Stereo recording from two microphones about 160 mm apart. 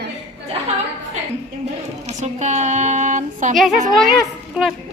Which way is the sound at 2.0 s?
45° right (ahead or behind).